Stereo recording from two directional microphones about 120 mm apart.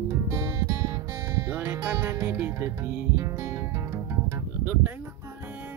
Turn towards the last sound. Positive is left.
turn(degrees=-15)  # may be behind; listen again after turning